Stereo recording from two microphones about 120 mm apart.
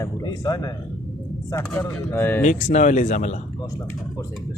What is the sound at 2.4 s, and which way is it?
Speech, 90° left.